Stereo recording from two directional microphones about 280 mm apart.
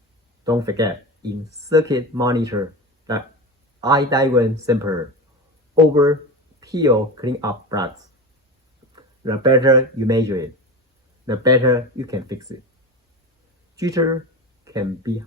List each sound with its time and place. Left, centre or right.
0.4 s speech: centre
9.0 s speech: centre
13.7 s speech: centre